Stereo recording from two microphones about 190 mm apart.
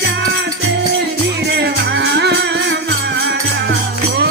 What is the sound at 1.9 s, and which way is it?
Music, 65° right (ahead or behind).